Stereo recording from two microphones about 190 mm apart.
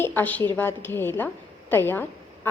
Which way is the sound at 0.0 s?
10° left (ahead or behind).